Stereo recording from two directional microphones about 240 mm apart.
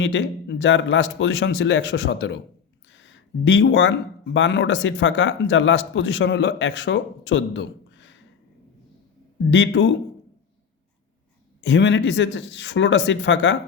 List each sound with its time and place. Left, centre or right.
0.0 s speech: left
2.9 s a sound: left
4.4 s speech: left
9.5 s speech: left
11.6 s speech: left